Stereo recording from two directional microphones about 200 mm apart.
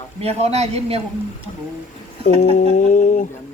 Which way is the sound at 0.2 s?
30° right (ahead or behind).